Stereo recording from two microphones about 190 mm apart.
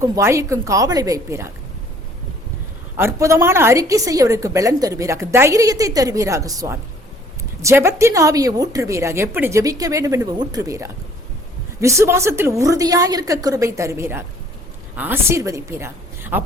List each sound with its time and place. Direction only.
0.0 s a woman's voice: 15° right (ahead or behind)
3.0 s a woman's voice: 15° right (ahead or behind)